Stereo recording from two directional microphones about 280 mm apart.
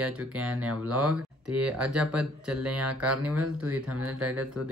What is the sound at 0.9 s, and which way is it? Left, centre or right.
Speech, right.